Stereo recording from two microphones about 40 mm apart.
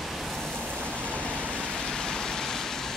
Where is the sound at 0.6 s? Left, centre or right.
Right.